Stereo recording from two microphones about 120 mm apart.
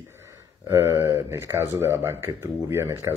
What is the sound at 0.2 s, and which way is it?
Speech, 25° right (ahead or behind).